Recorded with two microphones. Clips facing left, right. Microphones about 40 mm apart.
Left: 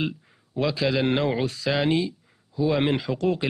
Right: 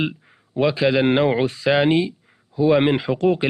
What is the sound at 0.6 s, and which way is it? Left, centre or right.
A man's voice, right.